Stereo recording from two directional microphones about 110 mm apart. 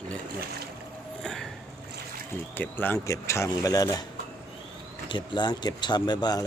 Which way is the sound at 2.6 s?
20° left (ahead or behind).